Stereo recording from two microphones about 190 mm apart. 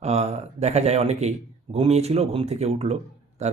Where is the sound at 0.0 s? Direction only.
35° right (ahead or behind).